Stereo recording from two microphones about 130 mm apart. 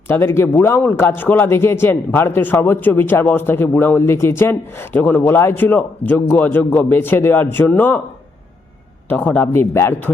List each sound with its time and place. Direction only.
0.1 s speech: 20° left (ahead or behind)
9.0 s speech: 10° left (ahead or behind)